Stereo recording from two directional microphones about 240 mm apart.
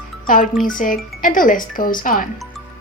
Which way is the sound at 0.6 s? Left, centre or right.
Left.